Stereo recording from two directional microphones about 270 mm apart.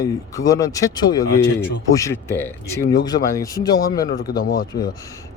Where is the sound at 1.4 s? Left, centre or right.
Left.